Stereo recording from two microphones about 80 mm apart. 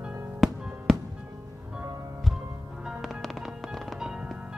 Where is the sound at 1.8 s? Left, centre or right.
Right.